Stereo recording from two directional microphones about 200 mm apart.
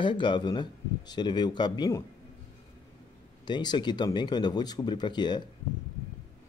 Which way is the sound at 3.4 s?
20° left (ahead or behind).